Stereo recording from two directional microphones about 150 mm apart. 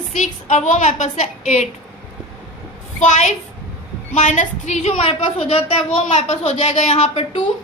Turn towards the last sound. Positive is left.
turn(degrees=40)  # may be behind; listen again after turning